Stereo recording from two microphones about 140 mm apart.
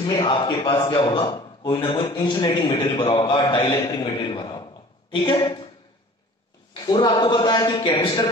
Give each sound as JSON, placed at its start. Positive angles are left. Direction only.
{"t": 0.0, "sound": "a man's voice", "side_deg": 30}
{"t": 6.7, "sound": "a man's voice", "side_deg": 30}